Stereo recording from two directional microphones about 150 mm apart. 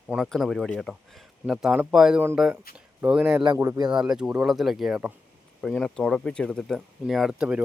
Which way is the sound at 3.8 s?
30° right (ahead or behind).